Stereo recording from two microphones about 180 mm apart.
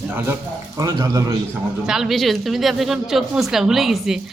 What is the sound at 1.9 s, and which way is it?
A woman's voice, centre (ahead or behind).